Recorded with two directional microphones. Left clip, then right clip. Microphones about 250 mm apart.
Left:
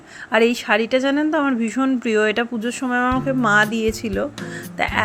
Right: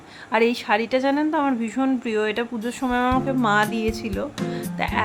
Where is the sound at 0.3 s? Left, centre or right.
Centre.